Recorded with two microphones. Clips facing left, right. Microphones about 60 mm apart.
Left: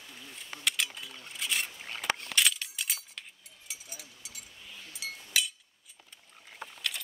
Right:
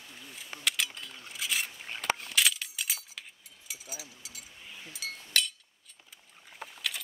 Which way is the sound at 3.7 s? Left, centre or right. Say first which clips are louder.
Right 3 dB; centre.